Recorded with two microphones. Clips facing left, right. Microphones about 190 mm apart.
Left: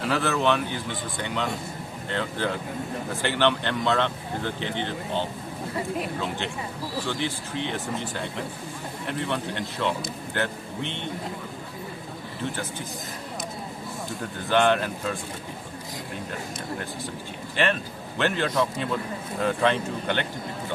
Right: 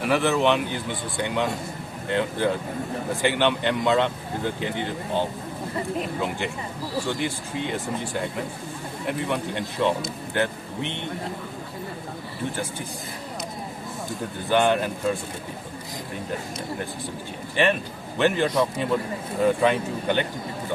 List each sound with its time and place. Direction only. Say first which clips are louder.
0.0 s speech: right 3 dB; 15° right (ahead or behind)
14.5 s speech: right 1 dB; 15° right (ahead or behind)
18.2 s speech: right 3 dB; 15° right (ahead or behind)